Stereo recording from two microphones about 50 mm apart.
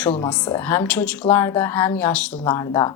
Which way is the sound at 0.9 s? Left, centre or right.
Left.